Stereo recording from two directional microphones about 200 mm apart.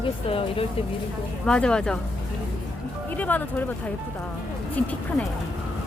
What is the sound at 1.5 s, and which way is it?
Speech, 5° left (ahead or behind).